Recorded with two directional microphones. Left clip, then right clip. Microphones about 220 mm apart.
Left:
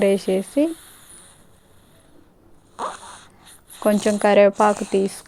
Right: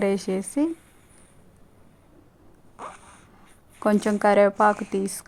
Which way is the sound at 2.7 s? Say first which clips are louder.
Left 10 dB; 50° left (ahead or behind).